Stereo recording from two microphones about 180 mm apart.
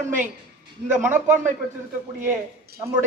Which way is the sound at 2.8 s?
20° right (ahead or behind).